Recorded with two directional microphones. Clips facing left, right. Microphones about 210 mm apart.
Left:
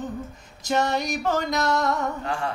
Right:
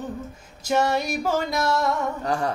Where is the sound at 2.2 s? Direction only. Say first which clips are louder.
Right 4 dB; 40° right (ahead or behind).